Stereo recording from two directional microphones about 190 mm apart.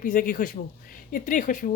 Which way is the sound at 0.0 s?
45° left (ahead or behind).